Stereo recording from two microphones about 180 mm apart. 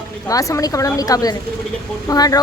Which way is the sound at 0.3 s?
20° left (ahead or behind).